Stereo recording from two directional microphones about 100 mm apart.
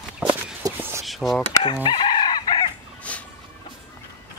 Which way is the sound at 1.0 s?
Centre (ahead or behind).